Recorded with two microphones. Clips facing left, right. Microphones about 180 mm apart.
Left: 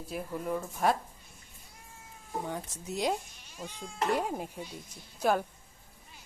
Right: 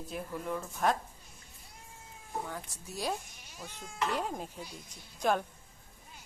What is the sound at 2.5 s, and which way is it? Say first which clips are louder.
Speech: left 6 dB; 20° left (ahead or behind).